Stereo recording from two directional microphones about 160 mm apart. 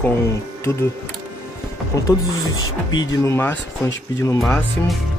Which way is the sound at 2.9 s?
25° left (ahead or behind).